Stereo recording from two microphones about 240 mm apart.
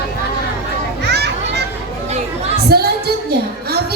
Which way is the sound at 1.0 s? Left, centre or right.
Right.